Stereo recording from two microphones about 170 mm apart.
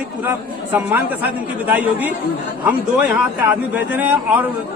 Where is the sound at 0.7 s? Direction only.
10° right (ahead or behind).